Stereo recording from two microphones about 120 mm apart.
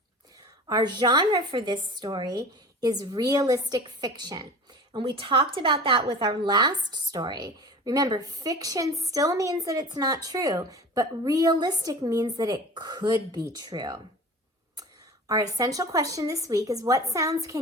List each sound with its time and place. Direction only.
0.3 s a woman's voice: 35° right (ahead or behind)
15.3 s a woman's voice: 30° right (ahead or behind)